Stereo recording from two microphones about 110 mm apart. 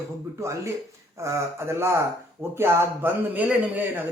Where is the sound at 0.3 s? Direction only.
25° right (ahead or behind).